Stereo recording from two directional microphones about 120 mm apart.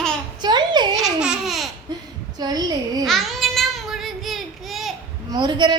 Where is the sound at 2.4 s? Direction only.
35° right (ahead or behind).